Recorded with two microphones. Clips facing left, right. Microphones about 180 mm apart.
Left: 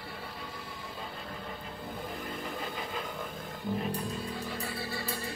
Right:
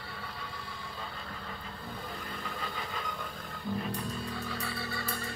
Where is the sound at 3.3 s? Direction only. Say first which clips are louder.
Left 2 dB; 20° left (ahead or behind).